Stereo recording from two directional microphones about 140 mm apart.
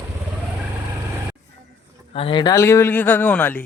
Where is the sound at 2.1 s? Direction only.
40° left (ahead or behind).